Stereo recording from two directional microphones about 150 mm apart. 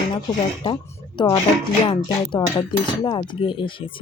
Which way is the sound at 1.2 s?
30° left (ahead or behind).